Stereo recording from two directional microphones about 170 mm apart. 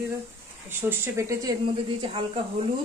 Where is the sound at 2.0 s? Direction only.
35° right (ahead or behind).